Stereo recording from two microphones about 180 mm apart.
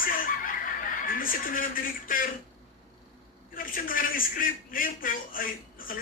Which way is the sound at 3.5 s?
50° left (ahead or behind).